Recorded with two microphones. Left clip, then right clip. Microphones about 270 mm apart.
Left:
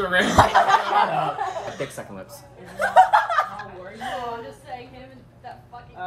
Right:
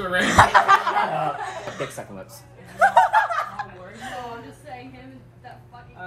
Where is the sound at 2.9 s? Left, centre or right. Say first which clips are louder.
Left 5 dB; left.